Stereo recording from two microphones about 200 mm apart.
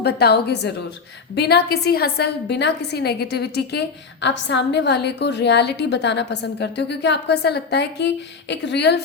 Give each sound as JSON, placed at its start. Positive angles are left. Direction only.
{"t": 0.0, "sound": "a woman's voice", "side_deg": 55}